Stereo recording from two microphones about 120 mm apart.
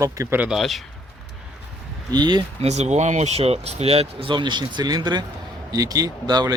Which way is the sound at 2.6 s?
65° right (ahead or behind).